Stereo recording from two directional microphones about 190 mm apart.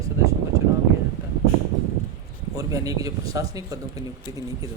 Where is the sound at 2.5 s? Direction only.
20° right (ahead or behind).